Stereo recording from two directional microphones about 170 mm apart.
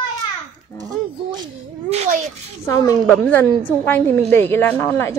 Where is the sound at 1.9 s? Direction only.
40° right (ahead or behind).